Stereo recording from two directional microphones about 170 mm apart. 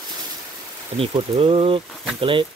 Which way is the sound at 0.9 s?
35° right (ahead or behind).